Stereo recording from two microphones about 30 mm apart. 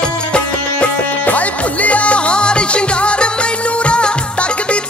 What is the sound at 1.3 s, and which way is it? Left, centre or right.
Music, left.